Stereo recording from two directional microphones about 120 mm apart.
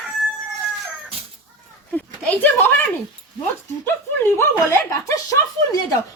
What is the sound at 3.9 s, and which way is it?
Speech, 20° left (ahead or behind).